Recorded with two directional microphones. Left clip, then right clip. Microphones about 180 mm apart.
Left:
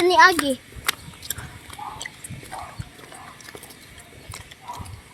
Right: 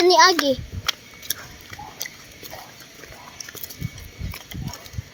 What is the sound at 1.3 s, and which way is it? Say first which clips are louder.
Chewing: right 4 dB; 5° right (ahead or behind).